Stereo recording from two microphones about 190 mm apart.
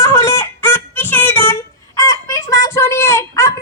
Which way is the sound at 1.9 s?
15° left (ahead or behind).